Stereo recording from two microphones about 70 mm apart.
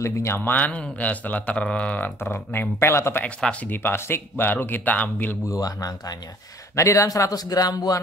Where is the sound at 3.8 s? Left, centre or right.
Left.